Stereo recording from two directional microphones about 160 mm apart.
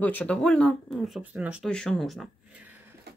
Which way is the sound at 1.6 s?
5° left (ahead or behind).